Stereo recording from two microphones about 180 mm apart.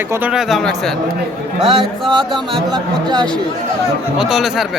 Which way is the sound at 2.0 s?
Centre (ahead or behind).